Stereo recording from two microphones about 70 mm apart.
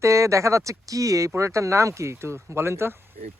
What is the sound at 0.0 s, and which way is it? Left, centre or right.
Speech, right.